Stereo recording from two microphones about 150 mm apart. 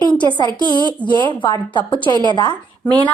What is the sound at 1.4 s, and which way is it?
A woman's voice, 35° left (ahead or behind).